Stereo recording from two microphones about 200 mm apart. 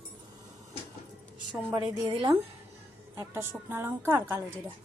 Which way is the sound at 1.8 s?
25° right (ahead or behind).